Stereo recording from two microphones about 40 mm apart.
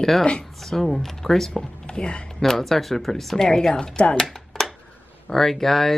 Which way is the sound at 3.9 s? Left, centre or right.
Left.